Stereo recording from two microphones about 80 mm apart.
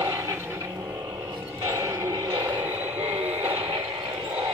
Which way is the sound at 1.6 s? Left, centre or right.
Right.